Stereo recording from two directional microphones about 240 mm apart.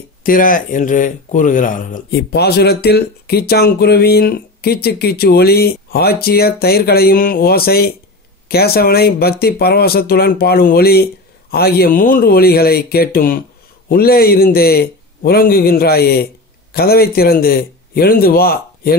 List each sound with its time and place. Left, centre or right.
0.2 s speech: left